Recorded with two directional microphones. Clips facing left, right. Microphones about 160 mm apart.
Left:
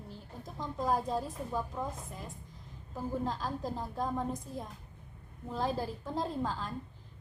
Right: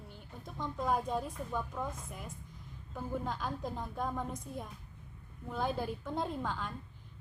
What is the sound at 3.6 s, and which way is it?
A woman's voice, 30° left (ahead or behind).